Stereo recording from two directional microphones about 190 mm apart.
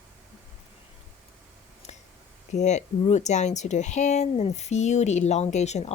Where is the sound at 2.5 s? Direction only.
35° left (ahead or behind).